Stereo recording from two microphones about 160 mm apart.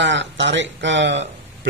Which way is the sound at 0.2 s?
90° right.